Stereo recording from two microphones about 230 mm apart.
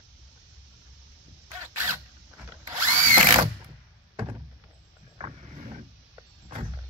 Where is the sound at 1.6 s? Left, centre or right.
Centre.